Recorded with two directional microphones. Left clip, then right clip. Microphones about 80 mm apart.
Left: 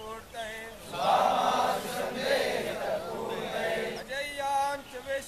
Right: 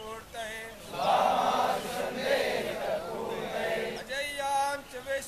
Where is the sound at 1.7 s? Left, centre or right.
Centre.